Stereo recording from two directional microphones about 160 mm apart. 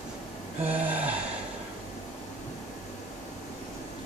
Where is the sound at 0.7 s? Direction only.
10° right (ahead or behind).